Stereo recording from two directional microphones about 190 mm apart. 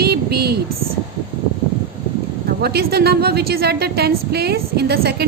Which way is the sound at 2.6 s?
55° right (ahead or behind).